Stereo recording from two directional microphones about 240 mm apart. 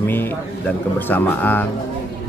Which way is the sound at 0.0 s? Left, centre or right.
Centre.